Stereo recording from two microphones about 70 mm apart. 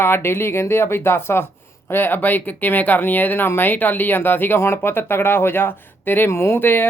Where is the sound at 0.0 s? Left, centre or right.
Left.